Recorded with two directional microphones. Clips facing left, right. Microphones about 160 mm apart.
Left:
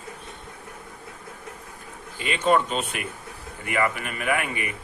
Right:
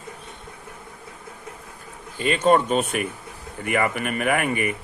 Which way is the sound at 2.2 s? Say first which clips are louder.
Right 4 dB; 40° right (ahead or behind).